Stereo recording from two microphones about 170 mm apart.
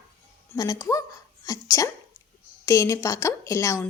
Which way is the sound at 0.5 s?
20° left (ahead or behind).